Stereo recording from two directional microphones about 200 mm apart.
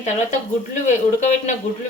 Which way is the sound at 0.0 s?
35° left (ahead or behind).